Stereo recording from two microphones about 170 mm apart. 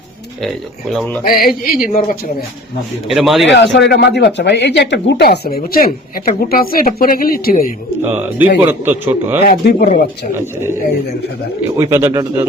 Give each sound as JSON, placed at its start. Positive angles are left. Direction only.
{"t": 0.4, "sound": "speech", "side_deg": 0}
{"t": 1.2, "sound": "speech", "side_deg": 60}
{"t": 3.1, "sound": "speech", "side_deg": 0}
{"t": 3.4, "sound": "speech", "side_deg": 90}
{"t": 8.0, "sound": "a man's voice", "side_deg": -10}
{"t": 9.6, "sound": "speech", "side_deg": 55}
{"t": 10.3, "sound": "a man's voice", "side_deg": -15}
{"t": 11.8, "sound": "a man's voice", "side_deg": -15}